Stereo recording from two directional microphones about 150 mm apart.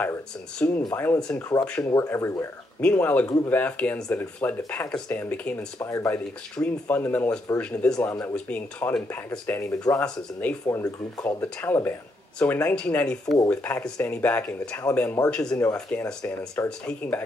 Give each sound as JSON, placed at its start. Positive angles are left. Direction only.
{"t": 0.0, "sound": "speech", "side_deg": 10}
{"t": 1.9, "sound": "speech", "side_deg": 20}